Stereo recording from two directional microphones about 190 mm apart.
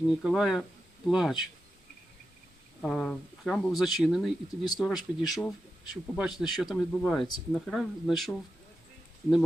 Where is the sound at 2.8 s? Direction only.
5° left (ahead or behind).